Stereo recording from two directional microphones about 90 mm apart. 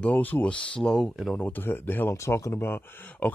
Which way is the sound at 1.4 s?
20° left (ahead or behind).